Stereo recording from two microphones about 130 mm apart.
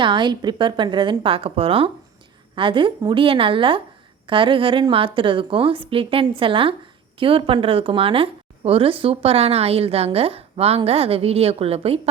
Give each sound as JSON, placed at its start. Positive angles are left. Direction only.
{"t": 0.0, "sound": "a woman's voice", "side_deg": -35}